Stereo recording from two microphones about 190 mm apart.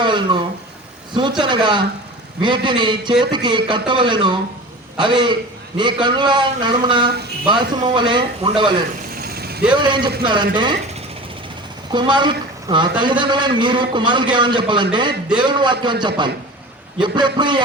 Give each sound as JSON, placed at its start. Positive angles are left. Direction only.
{"t": 0.0, "sound": "a sound", "side_deg": -25}
{"t": 1.1, "sound": "a man's voice", "side_deg": -25}
{"t": 9.1, "sound": "vehicle", "side_deg": -55}
{"t": 9.7, "sound": "a man's voice", "side_deg": -25}
{"t": 11.9, "sound": "a man's voice", "side_deg": -25}